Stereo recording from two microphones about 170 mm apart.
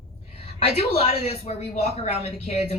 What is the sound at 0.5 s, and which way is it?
Speech, 35° left (ahead or behind).